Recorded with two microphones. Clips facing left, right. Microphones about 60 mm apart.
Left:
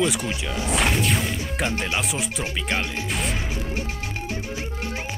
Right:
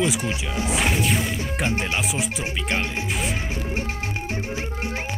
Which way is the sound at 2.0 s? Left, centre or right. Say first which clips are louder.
Right 1 dB; centre.